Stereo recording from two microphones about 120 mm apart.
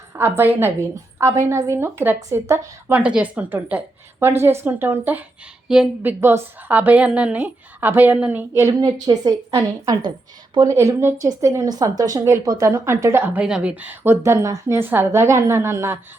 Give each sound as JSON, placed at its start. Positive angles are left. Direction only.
{"t": 0.2, "sound": "a woman's voice", "side_deg": -15}
{"t": 2.9, "sound": "a woman's voice", "side_deg": -10}
{"t": 5.6, "sound": "speech", "side_deg": -5}
{"t": 6.0, "sound": "a woman's voice", "side_deg": -20}
{"t": 9.0, "sound": "a woman's voice", "side_deg": -30}